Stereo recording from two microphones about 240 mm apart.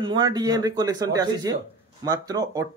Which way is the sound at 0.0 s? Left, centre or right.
Centre.